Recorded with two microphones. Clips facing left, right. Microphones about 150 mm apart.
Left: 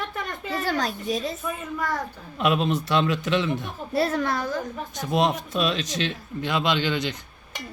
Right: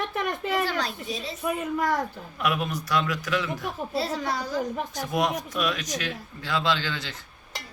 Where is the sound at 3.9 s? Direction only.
55° left (ahead or behind).